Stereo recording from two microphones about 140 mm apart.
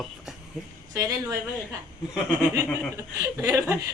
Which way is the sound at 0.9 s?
25° right (ahead or behind).